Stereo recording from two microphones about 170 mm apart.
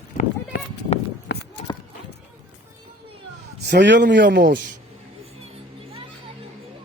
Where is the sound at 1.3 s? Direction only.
85° left.